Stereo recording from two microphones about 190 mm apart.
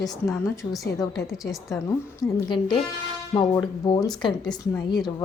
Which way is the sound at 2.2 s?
25° left (ahead or behind).